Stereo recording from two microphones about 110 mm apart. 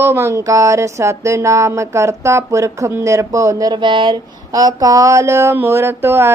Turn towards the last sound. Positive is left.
turn(degrees=-20)  # may be behind; listen again after turning